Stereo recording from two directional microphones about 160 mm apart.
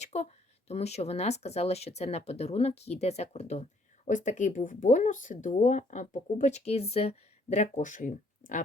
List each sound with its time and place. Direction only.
0.0 s speech: 40° left (ahead or behind)